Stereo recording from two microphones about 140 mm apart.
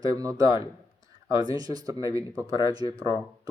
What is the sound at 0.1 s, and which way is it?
Speech, 25° right (ahead or behind).